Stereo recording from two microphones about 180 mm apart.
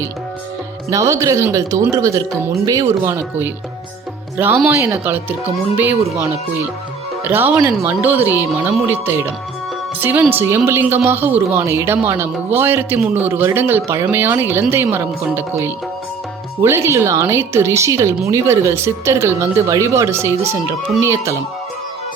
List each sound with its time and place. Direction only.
0.9 s speech: 15° right (ahead or behind)
7.3 s speech: 10° right (ahead or behind)